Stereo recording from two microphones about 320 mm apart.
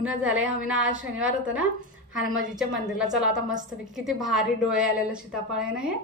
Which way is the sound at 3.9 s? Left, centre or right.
Centre.